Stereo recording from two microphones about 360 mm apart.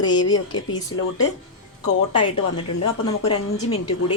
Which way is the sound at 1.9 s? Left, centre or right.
Left.